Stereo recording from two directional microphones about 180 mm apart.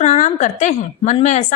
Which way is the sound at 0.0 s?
40° left (ahead or behind).